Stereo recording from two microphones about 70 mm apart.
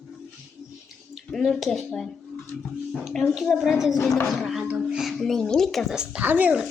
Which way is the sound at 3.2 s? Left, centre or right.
Centre.